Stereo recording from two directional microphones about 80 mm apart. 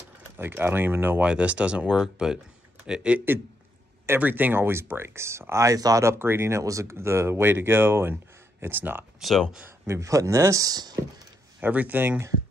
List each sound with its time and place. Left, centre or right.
0.4 s speech: right
1.2 s speech: centre
4.2 s speech: right
6.0 s speech: right
9.2 s speech: centre
9.8 s speech: right
11.6 s speech: centre